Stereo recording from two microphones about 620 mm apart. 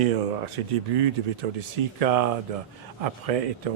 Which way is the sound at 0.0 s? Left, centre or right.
Right.